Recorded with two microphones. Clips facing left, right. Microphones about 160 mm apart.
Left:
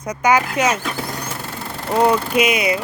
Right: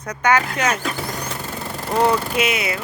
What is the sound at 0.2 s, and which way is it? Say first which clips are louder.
Speech: left 2 dB; 10° left (ahead or behind).